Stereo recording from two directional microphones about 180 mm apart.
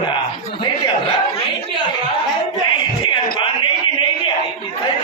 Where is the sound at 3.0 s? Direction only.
25° left (ahead or behind).